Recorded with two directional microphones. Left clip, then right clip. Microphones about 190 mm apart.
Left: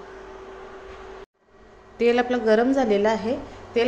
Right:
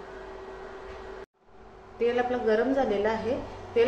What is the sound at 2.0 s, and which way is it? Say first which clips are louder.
A woman's voice: left 5 dB; 55° left (ahead or behind).